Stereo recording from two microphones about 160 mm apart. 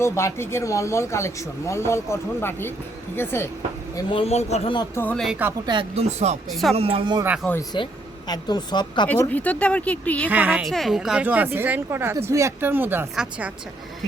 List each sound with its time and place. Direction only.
0.0 s speech: 15° left (ahead or behind)
3.9 s speech: 35° left (ahead or behind)
4.9 s speech: 5° left (ahead or behind)
5.6 s speech: 30° right (ahead or behind)
6.1 s speech: 45° right (ahead or behind)
6.5 s speech: centre (ahead or behind)
6.7 s speech: 35° right (ahead or behind)
7.7 s speech: 30° left (ahead or behind)
9.0 s speech: 10° left (ahead or behind)
10.2 s a woman's voice: 10° right (ahead or behind)